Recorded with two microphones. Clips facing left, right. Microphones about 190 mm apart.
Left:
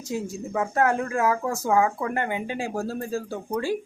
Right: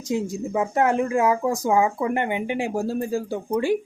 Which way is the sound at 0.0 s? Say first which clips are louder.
Right 5 dB; 20° right (ahead or behind).